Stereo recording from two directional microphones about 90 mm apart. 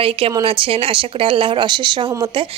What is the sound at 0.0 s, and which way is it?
Speech, 90° right.